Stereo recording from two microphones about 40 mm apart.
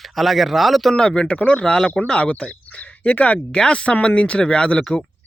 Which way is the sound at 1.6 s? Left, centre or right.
Left.